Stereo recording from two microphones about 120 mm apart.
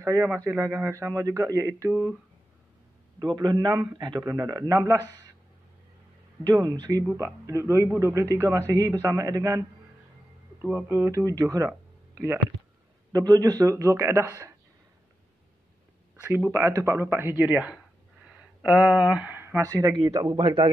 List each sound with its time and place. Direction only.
0.0 s a man's voice: 20° right (ahead or behind)
1.9 s speech: 15° right (ahead or behind)
3.2 s a man's voice: 35° right (ahead or behind)
4.2 s a man's voice: 25° right (ahead or behind)
6.4 s a man's voice: 30° right (ahead or behind)
10.6 s a man's voice: 15° right (ahead or behind)
13.1 s a man's voice: 30° right (ahead or behind)
16.3 s a man's voice: 20° right (ahead or behind); by 20.7 s 40° right (ahead or behind)